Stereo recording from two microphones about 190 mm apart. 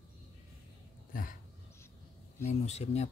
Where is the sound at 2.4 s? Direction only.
35° left (ahead or behind).